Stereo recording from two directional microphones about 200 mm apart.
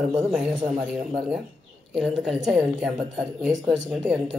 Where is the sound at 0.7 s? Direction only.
Centre (ahead or behind).